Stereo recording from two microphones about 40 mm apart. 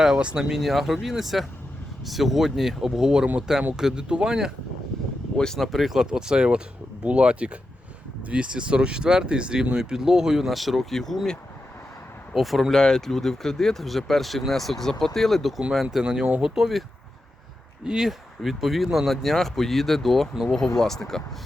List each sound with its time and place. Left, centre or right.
0.2 s speech: right
0.6 s speech: centre
5.5 s speech: centre
6.0 s speech: centre
12.3 s speech: centre
12.7 s speech: centre
17.8 s speech: centre
18.4 s speech: centre